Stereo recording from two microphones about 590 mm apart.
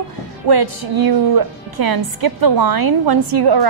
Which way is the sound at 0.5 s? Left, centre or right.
Right.